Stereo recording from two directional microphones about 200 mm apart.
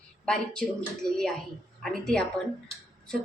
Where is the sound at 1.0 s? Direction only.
20° right (ahead or behind).